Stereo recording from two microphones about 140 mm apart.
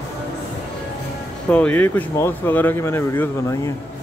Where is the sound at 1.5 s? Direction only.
10° left (ahead or behind).